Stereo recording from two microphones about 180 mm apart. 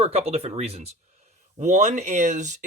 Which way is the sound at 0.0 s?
35° right (ahead or behind).